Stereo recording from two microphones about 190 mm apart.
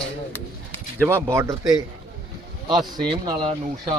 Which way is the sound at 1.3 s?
15° right (ahead or behind).